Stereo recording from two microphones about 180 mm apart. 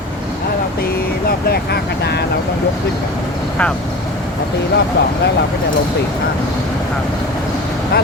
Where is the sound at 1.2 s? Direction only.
60° left (ahead or behind).